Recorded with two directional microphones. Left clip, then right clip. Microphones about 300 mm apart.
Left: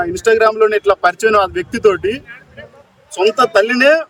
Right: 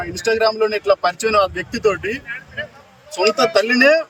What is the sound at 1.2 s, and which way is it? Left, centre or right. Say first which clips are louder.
Speech: left 4 dB; centre.